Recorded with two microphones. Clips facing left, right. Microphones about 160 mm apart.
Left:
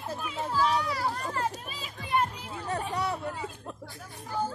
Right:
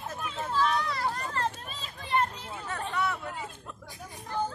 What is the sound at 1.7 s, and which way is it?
Music, 5° left (ahead or behind).